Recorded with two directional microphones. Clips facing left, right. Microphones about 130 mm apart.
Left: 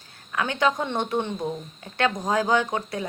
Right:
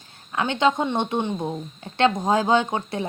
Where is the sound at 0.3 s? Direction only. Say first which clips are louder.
Right 3 dB; 25° right (ahead or behind).